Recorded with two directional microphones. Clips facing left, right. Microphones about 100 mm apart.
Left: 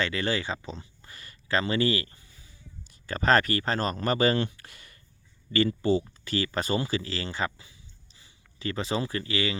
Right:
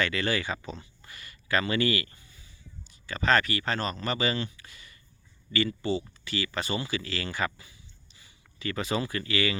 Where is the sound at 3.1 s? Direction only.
45° left (ahead or behind).